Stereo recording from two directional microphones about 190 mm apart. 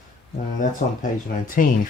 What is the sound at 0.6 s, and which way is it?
Speech, 45° left (ahead or behind).